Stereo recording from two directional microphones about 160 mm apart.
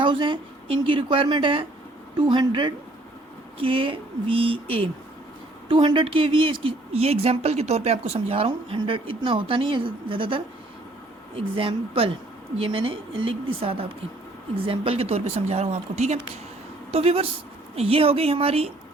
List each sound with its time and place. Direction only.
0.0 s a woman's voice: 30° right (ahead or behind)